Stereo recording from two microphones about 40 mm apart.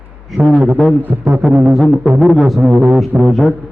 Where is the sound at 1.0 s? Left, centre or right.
Right.